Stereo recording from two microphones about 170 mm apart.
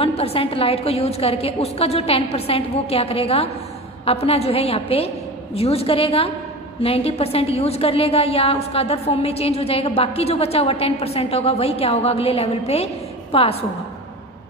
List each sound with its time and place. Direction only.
0.0 s a woman's voice: 35° left (ahead or behind)